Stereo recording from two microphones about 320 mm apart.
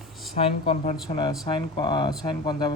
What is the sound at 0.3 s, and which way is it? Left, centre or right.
Speech, centre.